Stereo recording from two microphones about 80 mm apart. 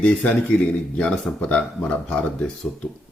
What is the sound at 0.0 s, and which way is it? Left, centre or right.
Speech, centre.